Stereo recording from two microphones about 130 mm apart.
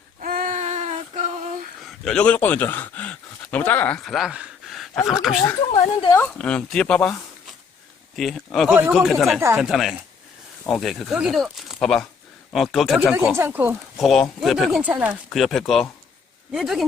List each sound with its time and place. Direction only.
0.2 s a sound: 90° right; by 1.3 s 65° right (ahead or behind)
2.0 s speech: 10° left (ahead or behind)
4.0 s speech: centre (ahead or behind)
5.7 s speech: 35° left (ahead or behind)
6.1 s speech: 10° left (ahead or behind)
13.1 s speech: 15° right (ahead or behind)
14.0 s speech: centre (ahead or behind)
14.8 s speech: 10° right (ahead or behind)
15.3 s speech: 5° left (ahead or behind)